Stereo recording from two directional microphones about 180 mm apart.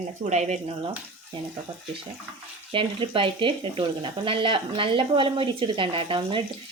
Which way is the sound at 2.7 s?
30° right (ahead or behind).